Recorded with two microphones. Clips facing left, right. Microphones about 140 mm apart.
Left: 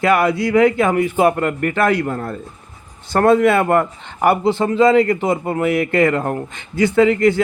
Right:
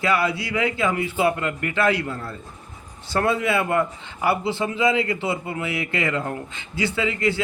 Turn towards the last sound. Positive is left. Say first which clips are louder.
# left 10 dB
turn(degrees=50)  # may be behind; listen again after turning